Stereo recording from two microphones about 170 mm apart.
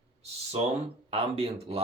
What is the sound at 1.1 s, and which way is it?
Speech, 35° right (ahead or behind).